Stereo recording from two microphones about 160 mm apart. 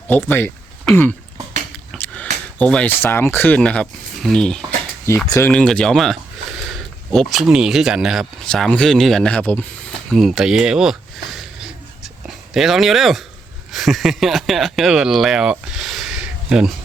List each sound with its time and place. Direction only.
0.1 s speech: 10° left (ahead or behind)
1.9 s a sound: centre (ahead or behind)
2.6 s speech: 10° left (ahead or behind)
5.1 s speech: 15° left (ahead or behind)
5.5 s speech: 5° left (ahead or behind)
11.3 s a sound: centre (ahead or behind)
12.5 s speech: centre (ahead or behind)